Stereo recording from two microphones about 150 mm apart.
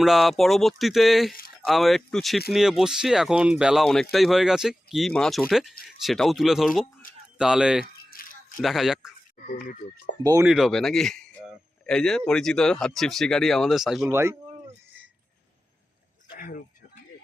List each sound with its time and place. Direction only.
0.0 s speech: centre (ahead or behind)
8.1 s a sound: 70° left (ahead or behind)
8.6 s speech: centre (ahead or behind)
10.4 s speech: 5° right (ahead or behind)
14.1 s speech: 15° right (ahead or behind)
16.3 s a sound: 65° left (ahead or behind)